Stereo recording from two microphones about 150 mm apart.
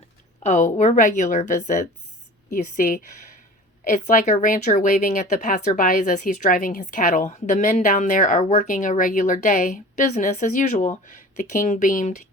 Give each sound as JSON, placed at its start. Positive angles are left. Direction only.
{"t": 0.4, "sound": "speech", "side_deg": 55}